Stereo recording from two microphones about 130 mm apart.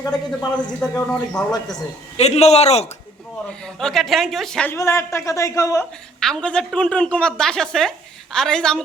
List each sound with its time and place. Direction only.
0.1 s a man's voice: 5° left (ahead or behind)
2.1 s a man's voice: 55° left (ahead or behind)
3.8 s a woman's voice: 5° left (ahead or behind)
4.7 s a man's voice: 20° left (ahead or behind)
6.1 s a woman's voice: 5° left (ahead or behind)